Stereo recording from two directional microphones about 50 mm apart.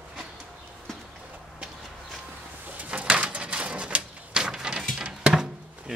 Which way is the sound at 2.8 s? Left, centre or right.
Right.